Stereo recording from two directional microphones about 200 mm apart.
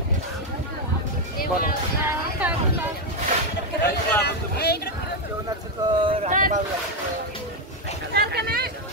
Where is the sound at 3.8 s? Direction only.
55° left (ahead or behind).